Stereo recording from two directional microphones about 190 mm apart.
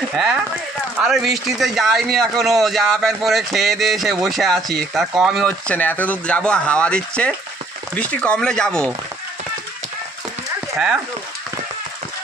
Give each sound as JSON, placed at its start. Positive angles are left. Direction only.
{"t": 0.1, "sound": "speech", "side_deg": 0}